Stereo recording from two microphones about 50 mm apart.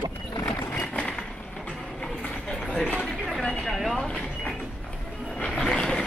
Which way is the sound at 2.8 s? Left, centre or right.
Left.